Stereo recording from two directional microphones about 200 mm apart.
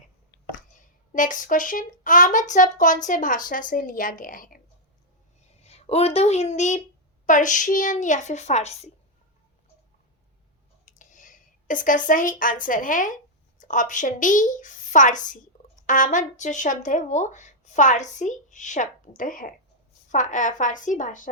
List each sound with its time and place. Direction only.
0.8 s a woman's voice: 40° left (ahead or behind)
5.5 s a woman's voice: 30° left (ahead or behind)
10.8 s a woman's voice: 40° left (ahead or behind)